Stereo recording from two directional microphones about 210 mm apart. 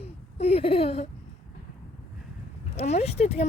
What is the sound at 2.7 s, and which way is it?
Speech, 30° left (ahead or behind).